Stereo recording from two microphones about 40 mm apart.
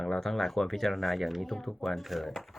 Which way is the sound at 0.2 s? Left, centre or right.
Centre.